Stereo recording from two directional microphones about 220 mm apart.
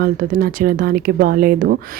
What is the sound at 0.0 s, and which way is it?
Speech, 40° right (ahead or behind).